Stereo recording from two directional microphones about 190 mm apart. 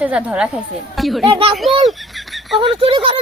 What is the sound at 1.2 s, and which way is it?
Speech, 25° right (ahead or behind).